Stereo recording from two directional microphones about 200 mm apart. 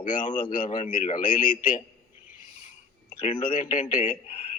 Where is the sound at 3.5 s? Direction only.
40° left (ahead or behind).